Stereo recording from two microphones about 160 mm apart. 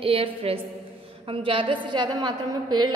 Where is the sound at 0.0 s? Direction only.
35° right (ahead or behind).